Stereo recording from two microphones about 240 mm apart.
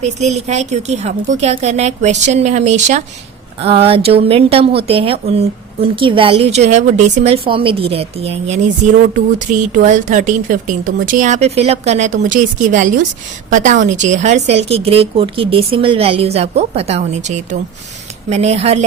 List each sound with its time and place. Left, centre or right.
0.0 s a woman's voice: right